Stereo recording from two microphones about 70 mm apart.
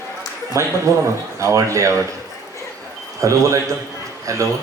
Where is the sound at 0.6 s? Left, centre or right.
Right.